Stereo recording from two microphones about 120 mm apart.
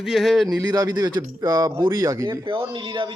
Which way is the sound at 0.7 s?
35° right (ahead or behind).